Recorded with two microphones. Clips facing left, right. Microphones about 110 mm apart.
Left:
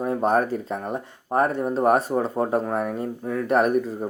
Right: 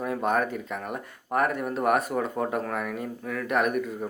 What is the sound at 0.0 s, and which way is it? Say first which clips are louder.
Speech: left 5 dB; 35° left (ahead or behind).